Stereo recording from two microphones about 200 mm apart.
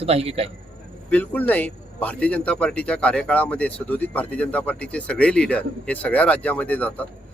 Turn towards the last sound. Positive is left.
turn(degrees=10)  # may be behind; listen again after turning